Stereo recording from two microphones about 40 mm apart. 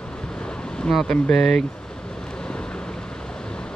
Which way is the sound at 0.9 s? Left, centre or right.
Centre.